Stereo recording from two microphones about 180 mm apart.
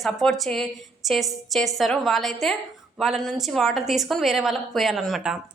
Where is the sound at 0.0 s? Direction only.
Centre (ahead or behind).